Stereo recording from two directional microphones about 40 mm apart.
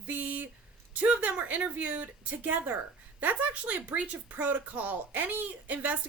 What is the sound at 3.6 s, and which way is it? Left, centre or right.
Speech, right.